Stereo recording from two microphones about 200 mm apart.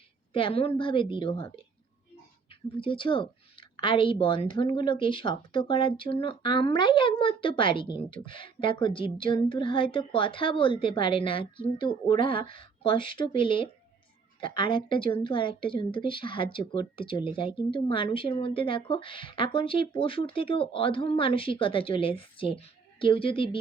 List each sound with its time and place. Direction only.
0.3 s speech: 30° left (ahead or behind)
2.7 s speech: 25° left (ahead or behind)